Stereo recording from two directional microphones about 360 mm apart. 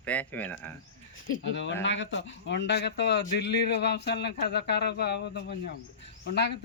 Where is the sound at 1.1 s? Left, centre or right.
Left.